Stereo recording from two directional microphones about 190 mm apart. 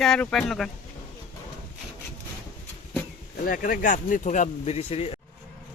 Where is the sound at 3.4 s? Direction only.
50° left (ahead or behind); by 5.2 s 30° left (ahead or behind).